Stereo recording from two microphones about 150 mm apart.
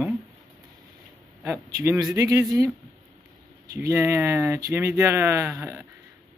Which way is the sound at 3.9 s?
15° right (ahead or behind).